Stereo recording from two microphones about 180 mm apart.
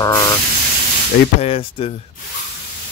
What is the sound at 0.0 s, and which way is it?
Spray, 20° left (ahead or behind).